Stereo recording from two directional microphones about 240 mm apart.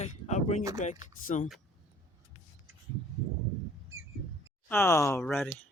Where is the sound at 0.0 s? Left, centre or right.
Left.